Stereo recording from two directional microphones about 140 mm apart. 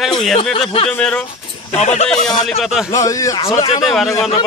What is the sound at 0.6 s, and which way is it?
Speech, 45° left (ahead or behind).